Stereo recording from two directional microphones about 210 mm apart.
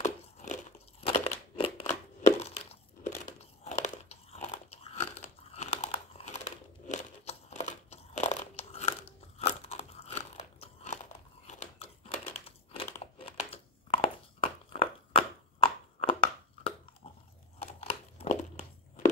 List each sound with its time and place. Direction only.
0.0 s crumpling: 35° left (ahead or behind)
3.3 s biting: 35° left (ahead or behind)
5.5 s crumpling: 30° left (ahead or behind)
9.4 s crunch: 30° left (ahead or behind)
11.4 s crumpling: 35° left (ahead or behind)
17.7 s crumpling: 30° left (ahead or behind)